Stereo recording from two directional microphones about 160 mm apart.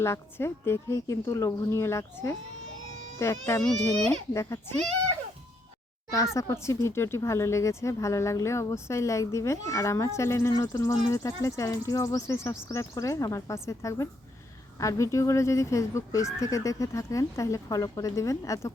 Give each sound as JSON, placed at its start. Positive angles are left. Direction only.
{"t": 0.0, "sound": "speech", "side_deg": 15}
{"t": 6.3, "sound": "speech", "side_deg": 15}